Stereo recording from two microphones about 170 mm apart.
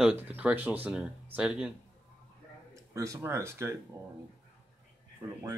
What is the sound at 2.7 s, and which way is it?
Speech, 20° right (ahead or behind).